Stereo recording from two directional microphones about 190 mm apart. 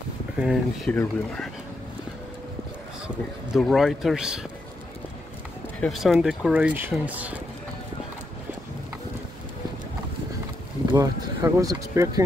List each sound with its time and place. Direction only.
0.4 s speech: 5° right (ahead or behind)
3.5 s speech: centre (ahead or behind)
5.8 s speech: centre (ahead or behind)
10.9 s speech: 20° right (ahead or behind)